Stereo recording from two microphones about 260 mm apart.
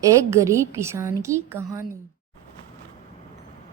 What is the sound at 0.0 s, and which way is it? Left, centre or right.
A woman's voice, centre.